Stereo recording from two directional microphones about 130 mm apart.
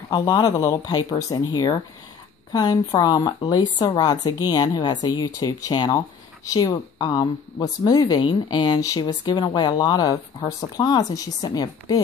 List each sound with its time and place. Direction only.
0.1 s speech: 30° left (ahead or behind)